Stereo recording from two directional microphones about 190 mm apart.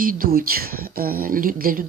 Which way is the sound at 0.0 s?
50° right (ahead or behind).